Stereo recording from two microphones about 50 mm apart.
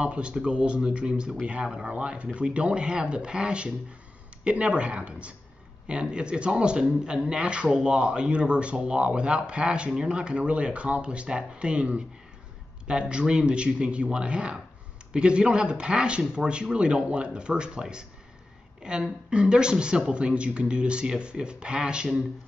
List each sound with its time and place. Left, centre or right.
0.0 s a woman's voice: right